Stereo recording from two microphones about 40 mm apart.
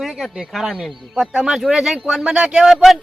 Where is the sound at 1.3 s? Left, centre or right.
Centre.